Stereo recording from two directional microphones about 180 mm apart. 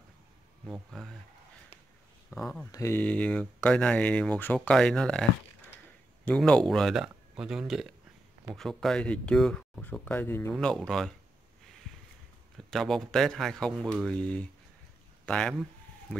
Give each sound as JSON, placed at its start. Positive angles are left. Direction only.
{"t": 0.7, "sound": "speech", "side_deg": 0}
{"t": 2.3, "sound": "speech", "side_deg": 0}
{"t": 2.6, "sound": "speech", "side_deg": 15}
{"t": 6.2, "sound": "speech", "side_deg": 5}
{"t": 12.5, "sound": "a man's voice", "side_deg": 0}